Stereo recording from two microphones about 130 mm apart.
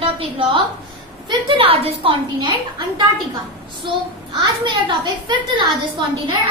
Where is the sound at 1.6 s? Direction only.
45° right (ahead or behind).